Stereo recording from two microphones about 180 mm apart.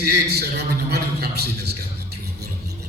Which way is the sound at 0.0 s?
60° right (ahead or behind).